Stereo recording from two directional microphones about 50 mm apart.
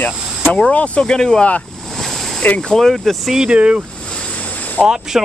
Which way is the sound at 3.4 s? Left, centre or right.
Right.